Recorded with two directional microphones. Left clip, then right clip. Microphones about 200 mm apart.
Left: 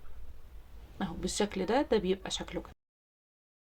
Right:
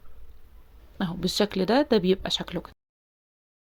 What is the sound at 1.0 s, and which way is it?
Speech, 35° right (ahead or behind).